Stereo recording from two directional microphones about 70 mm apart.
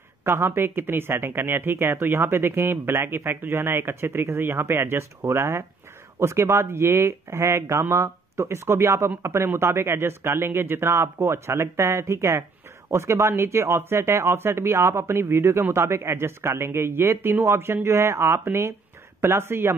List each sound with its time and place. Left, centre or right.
0.2 s speech: right